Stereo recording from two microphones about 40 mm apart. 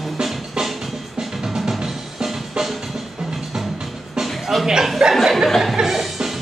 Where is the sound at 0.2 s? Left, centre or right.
Centre.